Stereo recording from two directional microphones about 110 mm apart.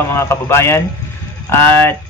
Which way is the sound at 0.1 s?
25° left (ahead or behind).